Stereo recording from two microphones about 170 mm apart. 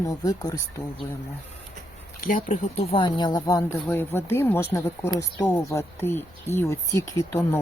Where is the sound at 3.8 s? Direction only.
10° left (ahead or behind).